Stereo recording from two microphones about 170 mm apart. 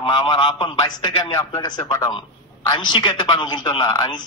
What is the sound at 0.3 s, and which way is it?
Speech, 25° left (ahead or behind).